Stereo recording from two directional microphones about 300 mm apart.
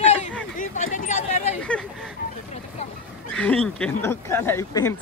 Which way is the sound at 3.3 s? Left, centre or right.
Centre.